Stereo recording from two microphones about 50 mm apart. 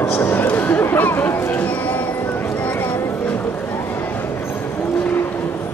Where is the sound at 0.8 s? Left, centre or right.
Left.